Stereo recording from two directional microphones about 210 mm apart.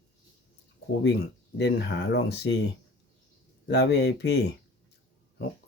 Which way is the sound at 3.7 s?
55° left (ahead or behind).